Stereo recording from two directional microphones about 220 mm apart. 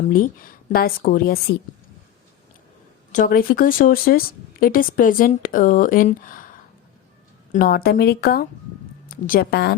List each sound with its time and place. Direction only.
0.0 s speech: 40° left (ahead or behind)
3.1 s speech: 40° left (ahead or behind)
7.5 s speech: 40° left (ahead or behind)